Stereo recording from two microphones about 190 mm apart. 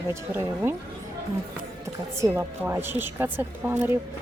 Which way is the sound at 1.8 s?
15° right (ahead or behind).